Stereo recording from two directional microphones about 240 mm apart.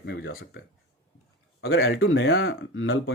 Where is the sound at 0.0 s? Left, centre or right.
Left.